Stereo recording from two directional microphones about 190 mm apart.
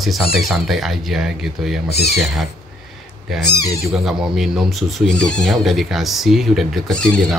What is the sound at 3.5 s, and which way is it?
Speech, 20° left (ahead or behind).